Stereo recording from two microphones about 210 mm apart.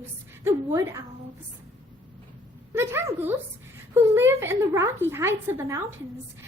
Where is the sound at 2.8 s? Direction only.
10° right (ahead or behind).